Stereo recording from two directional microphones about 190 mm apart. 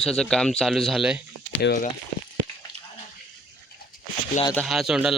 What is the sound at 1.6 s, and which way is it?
Speech, 60° left (ahead or behind).